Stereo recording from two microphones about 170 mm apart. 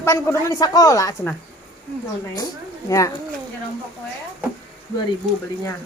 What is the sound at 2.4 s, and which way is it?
Speech, 20° left (ahead or behind).